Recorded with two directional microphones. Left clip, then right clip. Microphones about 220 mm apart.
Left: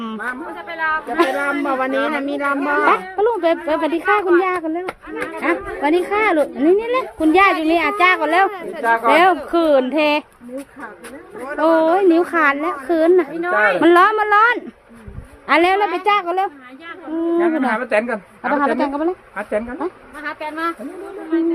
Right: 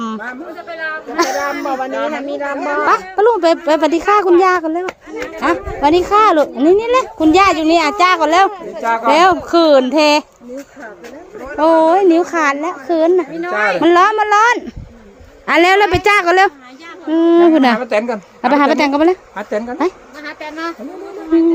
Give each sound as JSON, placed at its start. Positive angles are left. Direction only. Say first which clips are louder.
{"t": 0.0, "sound": "a sound", "louder": "right 4 dB", "side_deg": -15}
{"t": 0.7, "sound": "speech", "louder": "left 2 dB", "side_deg": -5}
{"t": 1.1, "sound": "speech", "louder": "right 4 dB", "side_deg": -15}
{"t": 1.6, "sound": "speech", "louder": "even", "side_deg": 50}
{"t": 2.8, "sound": "speech", "louder": "right 6 dB", "side_deg": -20}
{"t": 11.6, "sound": "speech", "louder": "right 4 dB", "side_deg": -20}
{"t": 13.4, "sound": "speech", "louder": "even", "side_deg": -25}
{"t": 13.8, "sound": "speech", "louder": "right 3 dB", "side_deg": -10}
{"t": 15.4, "sound": "a woman's voice", "louder": "right 4 dB", "side_deg": -25}
{"t": 20.2, "sound": "speech", "louder": "left 1 dB", "side_deg": -15}